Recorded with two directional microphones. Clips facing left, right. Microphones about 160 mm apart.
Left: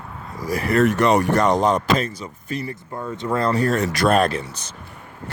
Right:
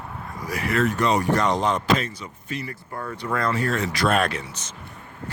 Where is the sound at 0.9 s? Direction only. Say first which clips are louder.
Left 5 dB; 65° left (ahead or behind).